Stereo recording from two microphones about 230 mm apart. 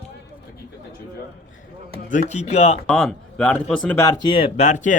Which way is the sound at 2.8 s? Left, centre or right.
Centre.